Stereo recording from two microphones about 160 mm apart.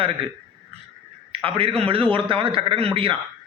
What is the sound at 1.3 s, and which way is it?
A man's voice, 35° right (ahead or behind).